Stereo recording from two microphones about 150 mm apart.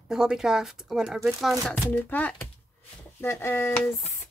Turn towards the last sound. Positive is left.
turn(degrees=15)  # may be behind; listen again after turning